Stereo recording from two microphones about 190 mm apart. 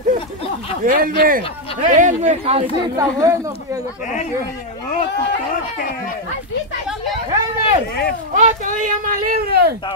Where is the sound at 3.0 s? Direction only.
15° right (ahead or behind).